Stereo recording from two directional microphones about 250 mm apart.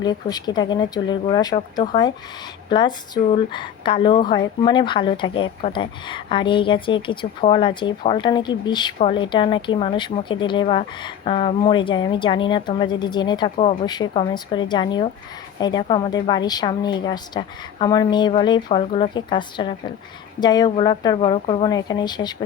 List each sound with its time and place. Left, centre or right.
0.0 s a woman's voice: centre